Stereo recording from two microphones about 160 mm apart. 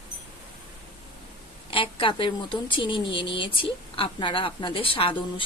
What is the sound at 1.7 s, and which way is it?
A woman's voice, 35° left (ahead or behind).